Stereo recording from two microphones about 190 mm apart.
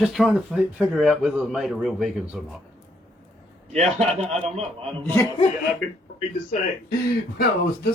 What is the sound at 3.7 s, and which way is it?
A man's voice, 35° right (ahead or behind).